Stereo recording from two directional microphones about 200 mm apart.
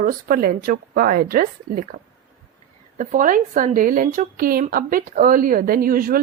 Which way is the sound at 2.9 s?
40° right (ahead or behind).